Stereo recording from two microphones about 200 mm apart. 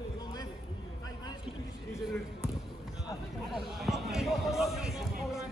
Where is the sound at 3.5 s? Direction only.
Centre (ahead or behind).